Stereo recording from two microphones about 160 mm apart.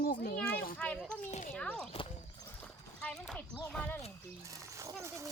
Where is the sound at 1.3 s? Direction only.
50° left (ahead or behind).